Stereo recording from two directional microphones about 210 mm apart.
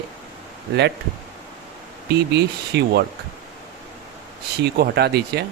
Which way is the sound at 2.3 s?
55° right (ahead or behind).